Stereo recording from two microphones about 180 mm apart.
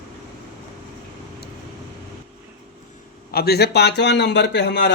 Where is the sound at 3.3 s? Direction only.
60° left (ahead or behind).